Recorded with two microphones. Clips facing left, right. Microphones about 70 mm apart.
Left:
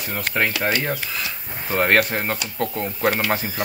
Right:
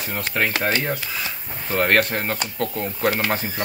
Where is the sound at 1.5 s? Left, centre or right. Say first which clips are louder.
Left 1 dB; centre.